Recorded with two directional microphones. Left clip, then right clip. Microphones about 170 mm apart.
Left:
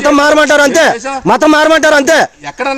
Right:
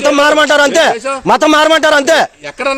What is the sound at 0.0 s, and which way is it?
Speech, 40° left (ahead or behind).